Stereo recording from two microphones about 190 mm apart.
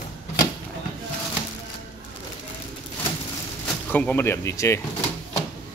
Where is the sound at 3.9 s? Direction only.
10° left (ahead or behind).